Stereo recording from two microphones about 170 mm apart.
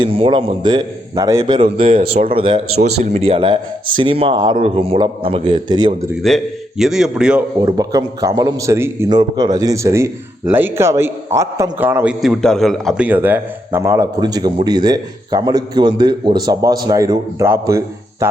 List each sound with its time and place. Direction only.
0.0 s a man's voice: 30° right (ahead or behind)
6.2 s a man's voice: centre (ahead or behind)
7.6 s a man's voice: 20° right (ahead or behind)
12.2 s a man's voice: centre (ahead or behind); by 18.3 s 15° right (ahead or behind)